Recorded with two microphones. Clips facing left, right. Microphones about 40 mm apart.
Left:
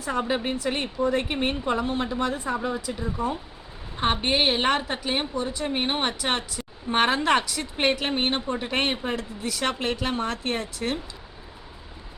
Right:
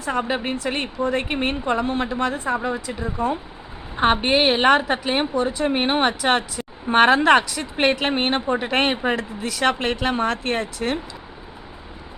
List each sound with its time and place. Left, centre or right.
0.0 s a woman's voice: right
7.9 s speech: right